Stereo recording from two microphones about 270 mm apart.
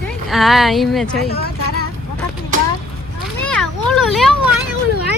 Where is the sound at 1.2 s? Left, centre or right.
Left.